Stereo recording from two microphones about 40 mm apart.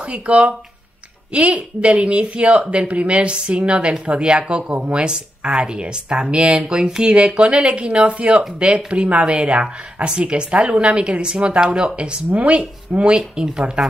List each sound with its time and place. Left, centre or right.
0.1 s speech: right
12.3 s speech: right
12.5 s speech: right